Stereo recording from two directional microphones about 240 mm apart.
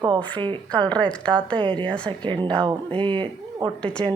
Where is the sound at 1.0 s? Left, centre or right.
Centre.